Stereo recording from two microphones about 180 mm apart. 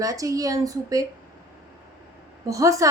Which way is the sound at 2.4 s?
20° right (ahead or behind).